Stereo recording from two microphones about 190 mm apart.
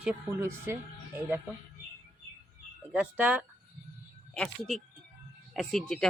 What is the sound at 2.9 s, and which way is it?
Speech, 10° right (ahead or behind).